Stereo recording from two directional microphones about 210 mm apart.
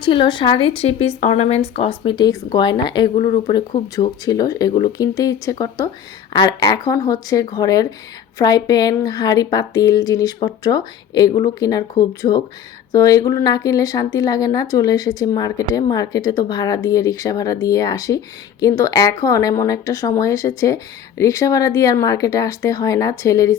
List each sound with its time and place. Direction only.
0.0 s speech: 25° left (ahead or behind)